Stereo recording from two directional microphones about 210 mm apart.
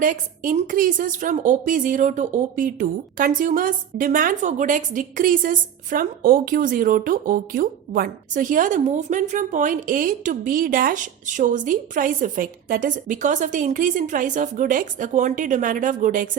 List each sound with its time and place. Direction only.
0.0 s a woman's voice: 40° right (ahead or behind)